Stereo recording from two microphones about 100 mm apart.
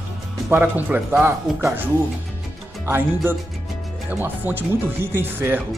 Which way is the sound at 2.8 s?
25° right (ahead or behind).